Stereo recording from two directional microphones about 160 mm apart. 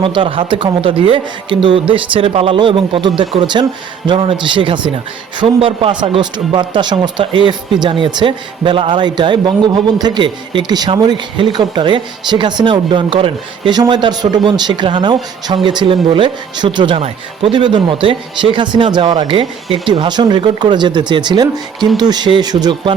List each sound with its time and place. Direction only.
0.0 s a man's voice: 30° right (ahead or behind)